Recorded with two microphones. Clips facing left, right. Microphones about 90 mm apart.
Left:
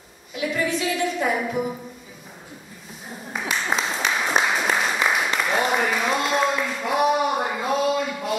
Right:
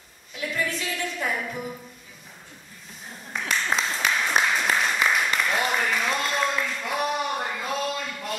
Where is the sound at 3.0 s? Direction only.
5° left (ahead or behind).